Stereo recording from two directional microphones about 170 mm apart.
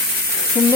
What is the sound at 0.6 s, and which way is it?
Sizzle, 10° right (ahead or behind).